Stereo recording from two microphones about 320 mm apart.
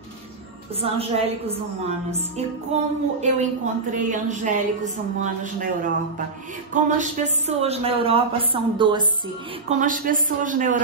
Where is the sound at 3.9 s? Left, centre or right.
Right.